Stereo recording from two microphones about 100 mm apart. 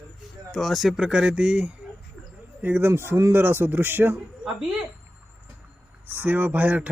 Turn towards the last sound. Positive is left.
turn(degrees=-15)  # may be behind; listen again after turning